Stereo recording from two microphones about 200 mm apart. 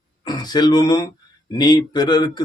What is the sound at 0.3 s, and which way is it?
Speech, 20° left (ahead or behind).